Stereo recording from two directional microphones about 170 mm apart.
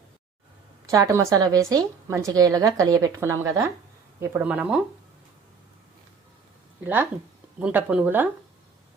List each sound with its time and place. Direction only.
0.9 s a woman's voice: 20° right (ahead or behind)
6.8 s speech: 10° right (ahead or behind)